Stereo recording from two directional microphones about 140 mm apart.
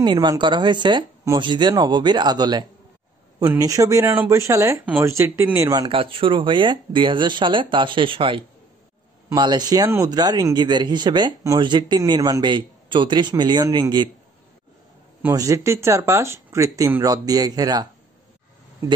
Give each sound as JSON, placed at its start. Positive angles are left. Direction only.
{"t": 0.0, "sound": "speech", "side_deg": -30}
{"t": 5.7, "sound": "speech", "side_deg": -35}
{"t": 15.3, "sound": "speech", "side_deg": -20}